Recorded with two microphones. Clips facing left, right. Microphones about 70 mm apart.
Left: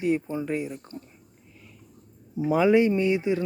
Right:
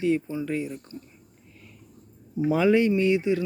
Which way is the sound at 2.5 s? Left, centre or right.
Centre.